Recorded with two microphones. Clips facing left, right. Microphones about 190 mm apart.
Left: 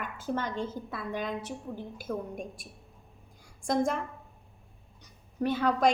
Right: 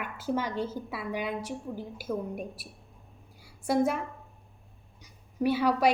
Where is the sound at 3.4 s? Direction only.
10° right (ahead or behind).